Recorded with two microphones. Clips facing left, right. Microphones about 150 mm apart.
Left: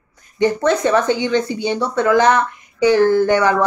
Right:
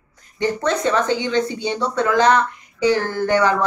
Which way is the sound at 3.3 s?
20° left (ahead or behind).